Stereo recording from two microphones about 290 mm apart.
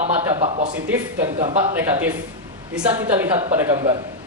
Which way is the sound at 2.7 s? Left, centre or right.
Centre.